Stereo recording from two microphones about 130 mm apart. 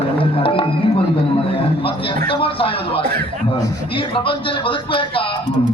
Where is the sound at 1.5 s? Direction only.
45° left (ahead or behind).